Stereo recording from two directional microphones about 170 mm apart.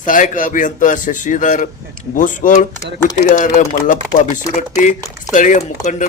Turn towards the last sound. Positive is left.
turn(degrees=45)  # may be behind; listen again after turning